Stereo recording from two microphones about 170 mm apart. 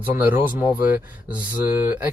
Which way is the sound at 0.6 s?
50° left (ahead or behind).